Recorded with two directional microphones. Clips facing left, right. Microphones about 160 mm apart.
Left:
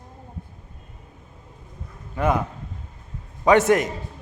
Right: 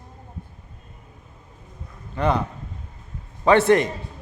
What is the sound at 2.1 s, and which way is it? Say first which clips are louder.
Speech: even; 10° left (ahead or behind).